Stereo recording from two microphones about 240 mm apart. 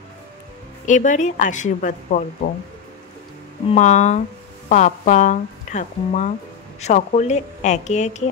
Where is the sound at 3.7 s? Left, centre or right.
Left.